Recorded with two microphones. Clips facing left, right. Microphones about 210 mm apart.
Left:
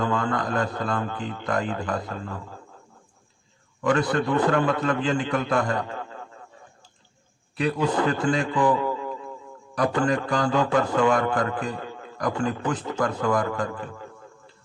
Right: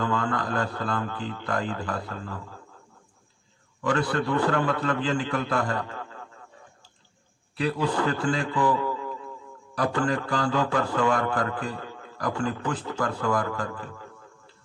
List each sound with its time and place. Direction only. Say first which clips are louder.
0.0 s a man's voice: left 2 dB; 20° left (ahead or behind)
3.8 s a man's voice: left 3 dB; 20° left (ahead or behind)
7.6 s a man's voice: left 2 dB; 20° left (ahead or behind)